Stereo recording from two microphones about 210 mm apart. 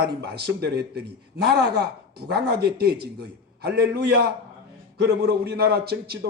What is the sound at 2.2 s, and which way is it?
A man's voice, 50° right (ahead or behind).